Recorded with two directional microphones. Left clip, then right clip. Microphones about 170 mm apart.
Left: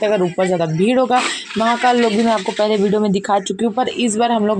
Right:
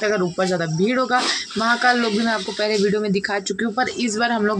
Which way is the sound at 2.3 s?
25° left (ahead or behind).